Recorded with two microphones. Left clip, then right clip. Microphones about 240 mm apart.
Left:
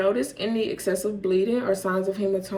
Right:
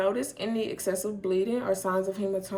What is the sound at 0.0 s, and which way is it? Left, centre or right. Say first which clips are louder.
Speech: left 4 dB; right.